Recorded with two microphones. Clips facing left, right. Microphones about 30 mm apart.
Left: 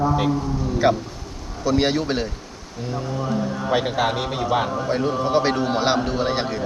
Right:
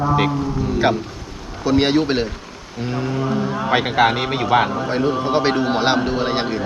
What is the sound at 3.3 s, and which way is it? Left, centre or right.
A man's voice, right.